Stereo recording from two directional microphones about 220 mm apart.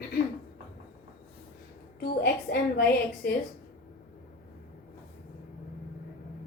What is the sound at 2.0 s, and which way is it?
A woman's voice, 45° left (ahead or behind).